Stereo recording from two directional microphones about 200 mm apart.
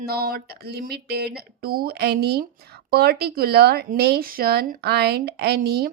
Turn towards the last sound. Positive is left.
turn(degrees=-50)  # may be behind; listen again after turning